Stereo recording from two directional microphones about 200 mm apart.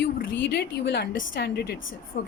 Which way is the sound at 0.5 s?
55° left (ahead or behind).